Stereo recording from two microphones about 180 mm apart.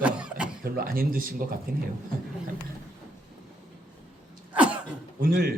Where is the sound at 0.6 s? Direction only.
55° right (ahead or behind).